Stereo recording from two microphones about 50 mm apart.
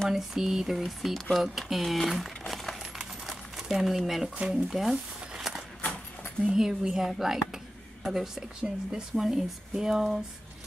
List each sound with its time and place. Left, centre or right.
0.1 s speech: centre
3.0 s crumpling: centre
4.4 s speech: centre
4.6 s speech: centre
6.4 s speech: centre